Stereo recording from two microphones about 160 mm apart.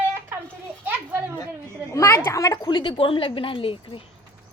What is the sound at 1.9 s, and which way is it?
A woman's voice, 15° left (ahead or behind).